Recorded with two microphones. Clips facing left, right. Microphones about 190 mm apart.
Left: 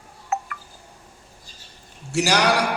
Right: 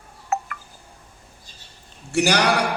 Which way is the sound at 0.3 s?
50° right (ahead or behind).